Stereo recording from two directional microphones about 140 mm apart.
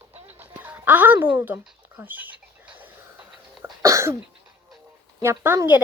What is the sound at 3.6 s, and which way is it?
Cough, 20° right (ahead or behind).